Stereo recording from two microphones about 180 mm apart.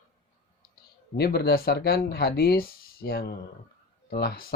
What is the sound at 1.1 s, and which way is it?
Speech, 60° left (ahead or behind).